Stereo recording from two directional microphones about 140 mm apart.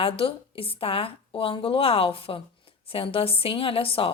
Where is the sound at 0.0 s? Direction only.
40° left (ahead or behind).